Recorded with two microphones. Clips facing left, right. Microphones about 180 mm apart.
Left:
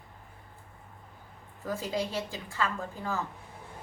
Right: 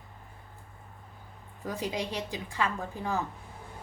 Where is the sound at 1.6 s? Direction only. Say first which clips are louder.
Left 1 dB; 20° right (ahead or behind).